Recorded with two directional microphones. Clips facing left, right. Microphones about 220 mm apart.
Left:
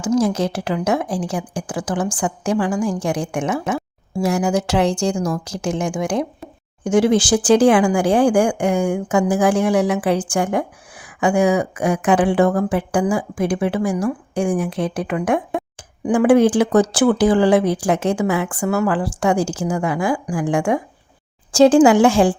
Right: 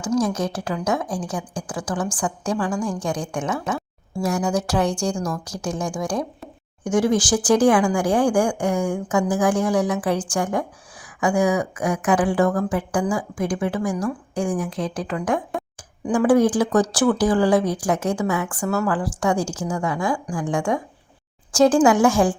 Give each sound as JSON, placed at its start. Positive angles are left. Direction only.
{"t": 0.0, "sound": "a woman's voice", "side_deg": 25}